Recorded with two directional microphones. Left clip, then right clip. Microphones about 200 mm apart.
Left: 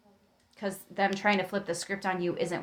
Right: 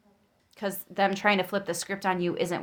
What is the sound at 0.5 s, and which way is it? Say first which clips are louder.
Speech: right 3 dB; 45° right (ahead or behind).